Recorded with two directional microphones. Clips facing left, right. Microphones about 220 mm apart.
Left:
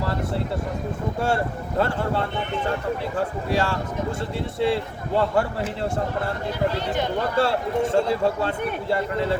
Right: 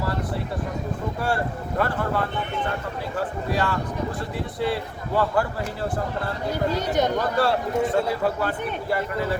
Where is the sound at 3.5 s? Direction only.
25° left (ahead or behind).